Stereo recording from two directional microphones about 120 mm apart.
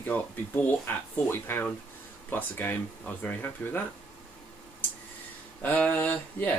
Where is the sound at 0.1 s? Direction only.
15° left (ahead or behind).